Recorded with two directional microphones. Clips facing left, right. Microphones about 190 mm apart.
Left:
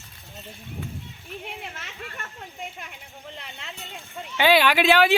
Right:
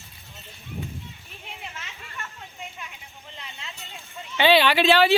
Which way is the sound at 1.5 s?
60° left (ahead or behind).